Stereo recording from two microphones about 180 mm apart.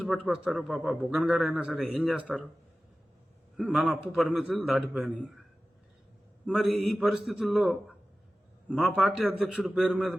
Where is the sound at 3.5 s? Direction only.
Centre (ahead or behind).